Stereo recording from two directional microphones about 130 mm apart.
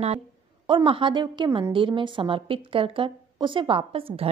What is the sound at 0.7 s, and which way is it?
A woman's voice, 40° right (ahead or behind).